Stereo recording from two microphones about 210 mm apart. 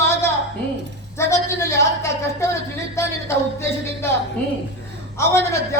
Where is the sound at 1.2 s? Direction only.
15° left (ahead or behind).